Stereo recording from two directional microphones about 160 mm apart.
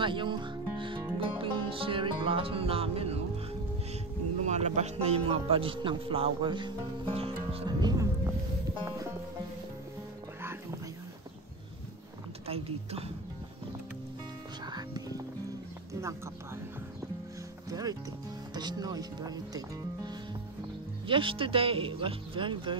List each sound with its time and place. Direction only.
0.0 s music: 30° right (ahead or behind)
4.5 s a man's voice: 45° right (ahead or behind); by 8.1 s 25° right (ahead or behind)
12.4 s speech: 35° right (ahead or behind)
14.7 s music: 25° right (ahead or behind)
15.9 s a sound: 20° right (ahead or behind)
17.6 s a man's voice: 25° right (ahead or behind)